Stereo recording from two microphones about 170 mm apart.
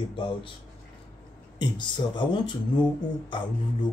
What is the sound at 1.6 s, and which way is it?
Speech, 25° left (ahead or behind).